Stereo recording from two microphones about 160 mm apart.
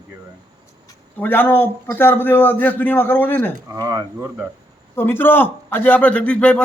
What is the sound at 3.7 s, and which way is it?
Speech, 20° right (ahead or behind).